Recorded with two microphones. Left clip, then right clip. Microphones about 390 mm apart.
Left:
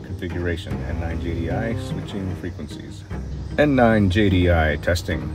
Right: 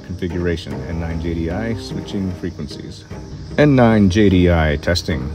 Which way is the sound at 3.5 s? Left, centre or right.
Centre.